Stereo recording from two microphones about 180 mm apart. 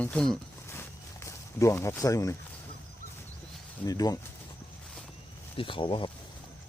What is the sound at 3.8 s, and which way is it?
Speech, 20° left (ahead or behind).